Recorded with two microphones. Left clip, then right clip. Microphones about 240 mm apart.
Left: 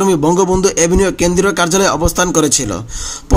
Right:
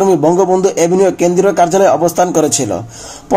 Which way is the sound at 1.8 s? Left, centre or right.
Left.